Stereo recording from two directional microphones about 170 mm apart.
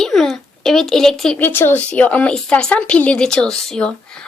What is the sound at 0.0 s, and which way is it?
Speech, centre (ahead or behind).